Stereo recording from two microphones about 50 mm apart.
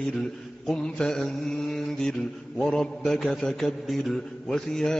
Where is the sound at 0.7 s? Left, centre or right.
Centre.